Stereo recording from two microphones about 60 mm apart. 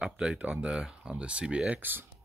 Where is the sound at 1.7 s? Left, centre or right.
Right.